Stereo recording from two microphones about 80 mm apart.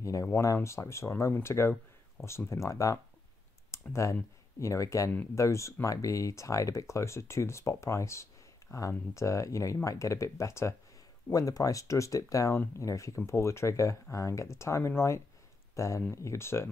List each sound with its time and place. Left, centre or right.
0.0 s speech: left